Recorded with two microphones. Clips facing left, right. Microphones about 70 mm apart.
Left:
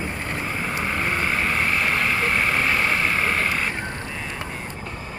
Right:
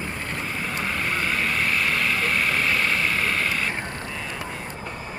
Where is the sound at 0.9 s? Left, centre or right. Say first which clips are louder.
Left 2 dB; left.